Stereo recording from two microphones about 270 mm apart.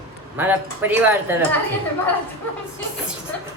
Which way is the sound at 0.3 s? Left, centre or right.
Centre.